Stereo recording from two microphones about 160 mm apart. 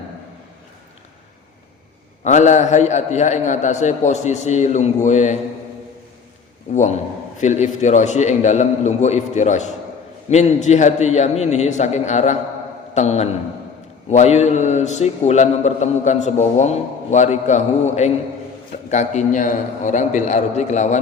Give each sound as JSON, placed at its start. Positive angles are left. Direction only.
{"t": 2.2, "sound": "mantra", "side_deg": 50}
{"t": 6.7, "sound": "mantra", "side_deg": 45}
{"t": 12.9, "sound": "a man's voice", "side_deg": 45}
{"t": 14.1, "sound": "mantra", "side_deg": 45}